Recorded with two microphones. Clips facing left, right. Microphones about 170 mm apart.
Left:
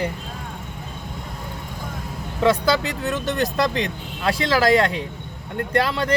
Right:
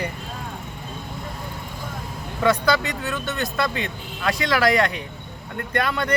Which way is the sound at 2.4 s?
30° left (ahead or behind).